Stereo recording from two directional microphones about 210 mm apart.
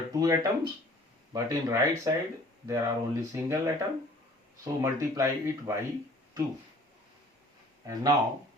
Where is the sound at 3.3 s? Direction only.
15° right (ahead or behind).